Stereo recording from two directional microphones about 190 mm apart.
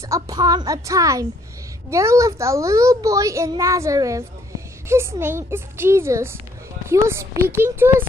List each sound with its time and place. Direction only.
0.0 s a child's voice: 20° right (ahead or behind)